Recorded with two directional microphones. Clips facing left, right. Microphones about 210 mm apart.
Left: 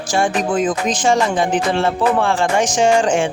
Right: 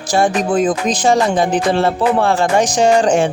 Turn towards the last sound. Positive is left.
turn(degrees=-40)  # may be behind; listen again after turning